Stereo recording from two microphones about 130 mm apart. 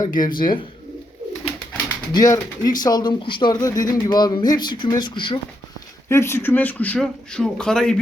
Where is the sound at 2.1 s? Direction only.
30° left (ahead or behind).